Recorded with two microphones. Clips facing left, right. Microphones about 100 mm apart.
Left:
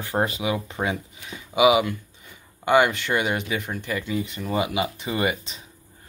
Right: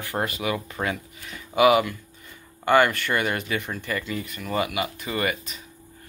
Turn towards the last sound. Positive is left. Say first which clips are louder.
# left 2 dB
turn(degrees=20)  # may be behind; listen again after turning